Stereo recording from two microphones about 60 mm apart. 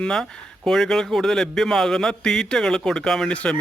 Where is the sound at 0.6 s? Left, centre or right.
Centre.